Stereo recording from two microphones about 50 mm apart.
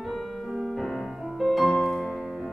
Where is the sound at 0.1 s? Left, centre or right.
Centre.